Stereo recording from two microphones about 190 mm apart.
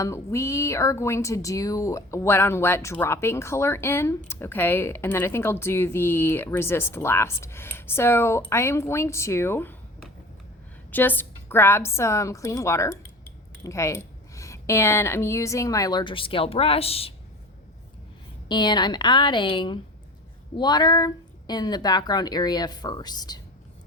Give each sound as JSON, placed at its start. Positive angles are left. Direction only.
{"t": 0.0, "sound": "speech", "side_deg": 15}
{"t": 10.9, "sound": "a woman's voice", "side_deg": 10}
{"t": 18.4, "sound": "speech", "side_deg": 25}